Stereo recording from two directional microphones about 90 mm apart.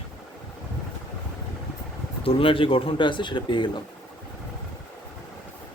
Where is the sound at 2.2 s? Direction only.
80° left; by 3.7 s 60° left (ahead or behind).